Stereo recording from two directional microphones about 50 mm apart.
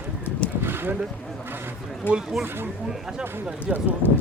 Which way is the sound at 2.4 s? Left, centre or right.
Right.